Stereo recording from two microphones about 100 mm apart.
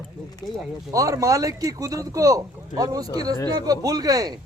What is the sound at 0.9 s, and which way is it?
Speech, 35° right (ahead or behind).